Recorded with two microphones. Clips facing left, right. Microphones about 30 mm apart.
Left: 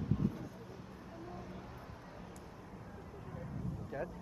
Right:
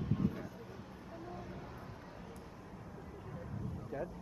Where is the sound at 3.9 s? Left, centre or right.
Centre.